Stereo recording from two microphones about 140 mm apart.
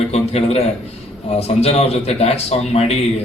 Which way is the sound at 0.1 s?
50° left (ahead or behind).